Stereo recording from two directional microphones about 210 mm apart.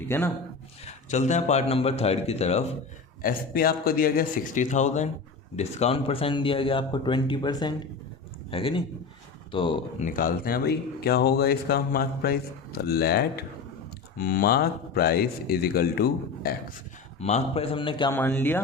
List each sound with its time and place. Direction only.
0.9 s a man's voice: 35° left (ahead or behind)
3.2 s a man's voice: 45° left (ahead or behind); by 10.1 s 25° left (ahead or behind)
10.2 s speech: 45° left (ahead or behind)
17.2 s a man's voice: 30° left (ahead or behind)
18.1 s speech: 10° left (ahead or behind)